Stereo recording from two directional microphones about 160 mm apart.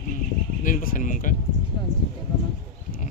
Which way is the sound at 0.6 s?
55° left (ahead or behind).